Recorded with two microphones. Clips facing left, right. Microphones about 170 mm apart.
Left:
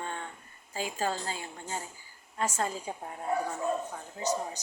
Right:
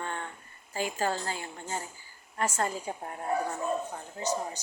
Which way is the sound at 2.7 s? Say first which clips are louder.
Right 2 dB; 5° left (ahead or behind).